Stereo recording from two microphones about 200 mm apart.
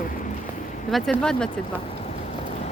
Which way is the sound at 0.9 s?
5° left (ahead or behind).